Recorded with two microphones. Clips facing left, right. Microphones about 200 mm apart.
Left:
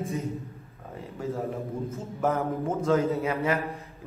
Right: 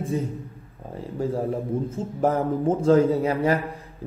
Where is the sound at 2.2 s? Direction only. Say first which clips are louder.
Right 4 dB; 30° right (ahead or behind).